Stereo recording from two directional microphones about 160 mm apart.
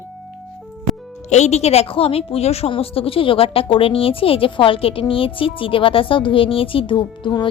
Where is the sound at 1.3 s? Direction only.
45° left (ahead or behind).